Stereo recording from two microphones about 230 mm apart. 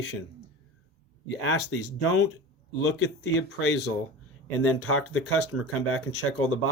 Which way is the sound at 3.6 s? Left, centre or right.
Left.